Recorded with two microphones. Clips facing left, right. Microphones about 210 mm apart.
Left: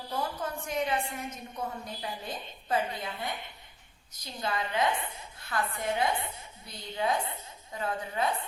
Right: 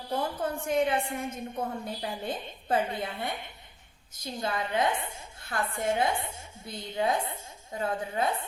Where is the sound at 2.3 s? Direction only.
30° right (ahead or behind).